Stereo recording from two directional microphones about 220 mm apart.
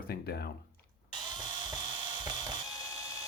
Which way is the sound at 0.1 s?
45° left (ahead or behind).